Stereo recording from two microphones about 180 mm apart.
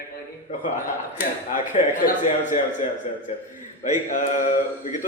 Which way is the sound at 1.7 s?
45° left (ahead or behind).